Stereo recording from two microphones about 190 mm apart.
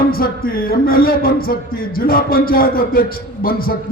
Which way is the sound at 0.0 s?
50° left (ahead or behind).